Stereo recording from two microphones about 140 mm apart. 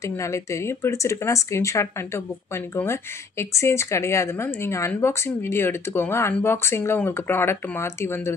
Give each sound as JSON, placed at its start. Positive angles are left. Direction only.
{"t": 0.0, "sound": "speech", "side_deg": 20}